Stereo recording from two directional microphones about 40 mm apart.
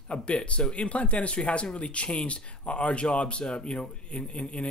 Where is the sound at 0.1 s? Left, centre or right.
Left.